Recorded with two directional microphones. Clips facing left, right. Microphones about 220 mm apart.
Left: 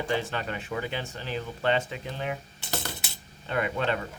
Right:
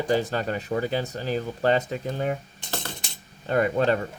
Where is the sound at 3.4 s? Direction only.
40° right (ahead or behind).